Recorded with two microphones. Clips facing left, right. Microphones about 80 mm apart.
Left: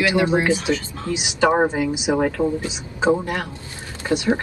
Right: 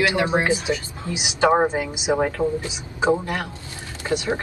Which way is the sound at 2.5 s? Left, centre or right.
Left.